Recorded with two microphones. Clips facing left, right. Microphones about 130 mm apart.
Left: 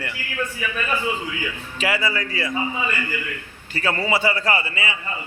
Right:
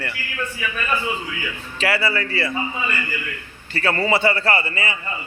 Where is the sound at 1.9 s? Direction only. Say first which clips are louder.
Right 2 dB; 15° left (ahead or behind).